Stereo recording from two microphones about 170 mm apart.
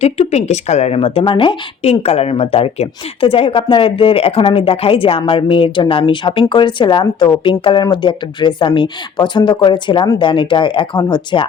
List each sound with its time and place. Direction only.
0.0 s a woman's voice: 40° left (ahead or behind)